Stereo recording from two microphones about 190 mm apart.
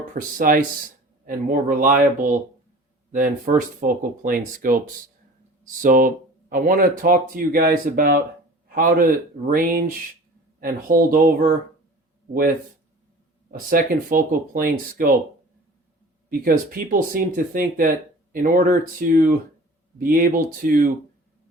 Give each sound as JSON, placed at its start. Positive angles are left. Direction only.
{"t": 0.1, "sound": "a man's voice", "side_deg": -45}
{"t": 16.4, "sound": "speech", "side_deg": -50}